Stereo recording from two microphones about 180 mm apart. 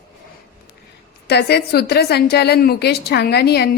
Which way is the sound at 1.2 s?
65° left (ahead or behind).